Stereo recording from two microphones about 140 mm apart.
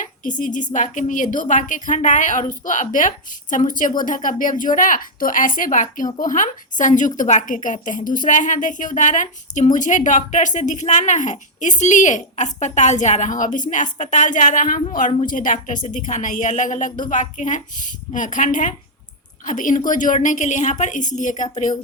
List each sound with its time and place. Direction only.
0.0 s a woman's voice: 65° left (ahead or behind)